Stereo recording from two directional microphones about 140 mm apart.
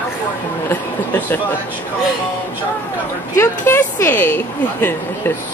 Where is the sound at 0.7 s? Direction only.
15° left (ahead or behind).